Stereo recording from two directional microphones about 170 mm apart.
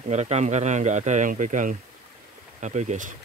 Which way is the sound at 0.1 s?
40° right (ahead or behind).